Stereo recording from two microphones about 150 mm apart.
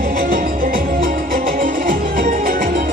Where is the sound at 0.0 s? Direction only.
65° right (ahead or behind).